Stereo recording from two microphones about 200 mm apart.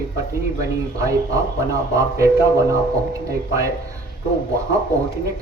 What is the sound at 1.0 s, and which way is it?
A man's voice, 15° right (ahead or behind).